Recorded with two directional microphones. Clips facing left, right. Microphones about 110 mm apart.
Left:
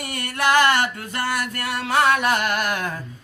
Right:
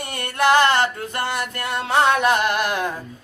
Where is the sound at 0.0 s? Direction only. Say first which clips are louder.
Right 3 dB; 25° right (ahead or behind).